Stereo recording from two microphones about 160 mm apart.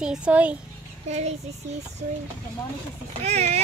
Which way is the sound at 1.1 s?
45° right (ahead or behind).